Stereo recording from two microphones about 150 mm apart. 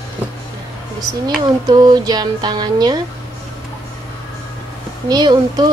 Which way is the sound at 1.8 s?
25° right (ahead or behind).